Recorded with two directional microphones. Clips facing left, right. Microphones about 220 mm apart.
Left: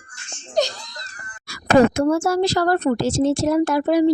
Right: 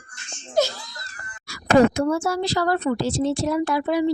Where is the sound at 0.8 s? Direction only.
20° left (ahead or behind).